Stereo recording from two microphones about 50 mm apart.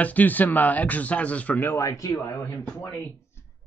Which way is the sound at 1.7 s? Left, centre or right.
Left.